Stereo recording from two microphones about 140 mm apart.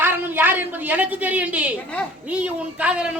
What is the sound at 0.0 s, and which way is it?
A woman's voice, 15° right (ahead or behind).